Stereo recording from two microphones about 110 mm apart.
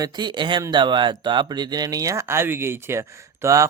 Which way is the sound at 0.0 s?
45° right (ahead or behind).